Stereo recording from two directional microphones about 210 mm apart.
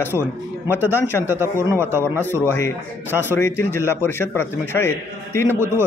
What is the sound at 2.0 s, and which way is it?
A man's voice, 10° left (ahead or behind).